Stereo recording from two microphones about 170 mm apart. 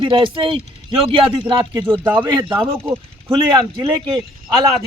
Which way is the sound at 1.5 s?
20° right (ahead or behind).